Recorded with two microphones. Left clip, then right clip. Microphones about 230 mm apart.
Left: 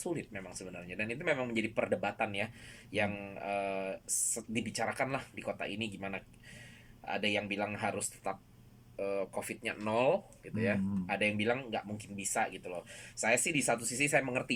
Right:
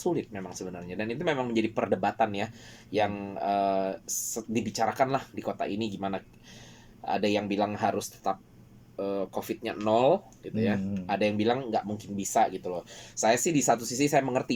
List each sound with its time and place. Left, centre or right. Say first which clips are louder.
0.0 s speech: right 9 dB; centre